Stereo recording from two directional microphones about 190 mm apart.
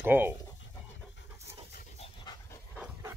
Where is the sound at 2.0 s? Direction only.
30° left (ahead or behind).